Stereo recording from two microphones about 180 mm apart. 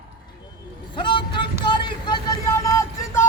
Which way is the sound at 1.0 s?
25° left (ahead or behind).